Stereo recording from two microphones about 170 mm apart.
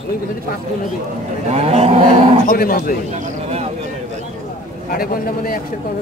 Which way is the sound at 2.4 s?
60° left (ahead or behind).